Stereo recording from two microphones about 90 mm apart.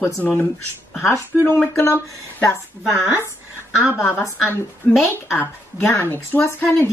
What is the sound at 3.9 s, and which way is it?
A woman's voice, 30° left (ahead or behind).